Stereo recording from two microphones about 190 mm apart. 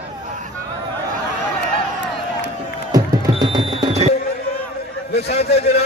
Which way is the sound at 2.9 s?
20° right (ahead or behind).